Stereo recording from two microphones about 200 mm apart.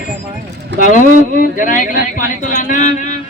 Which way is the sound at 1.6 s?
40° left (ahead or behind).